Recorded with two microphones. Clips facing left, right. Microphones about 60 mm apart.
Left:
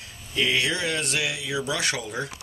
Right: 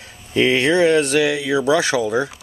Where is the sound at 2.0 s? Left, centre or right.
Right.